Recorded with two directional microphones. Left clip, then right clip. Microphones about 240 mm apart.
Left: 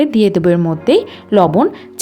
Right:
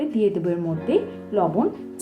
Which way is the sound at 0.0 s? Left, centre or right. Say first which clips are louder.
Left 10 dB; left.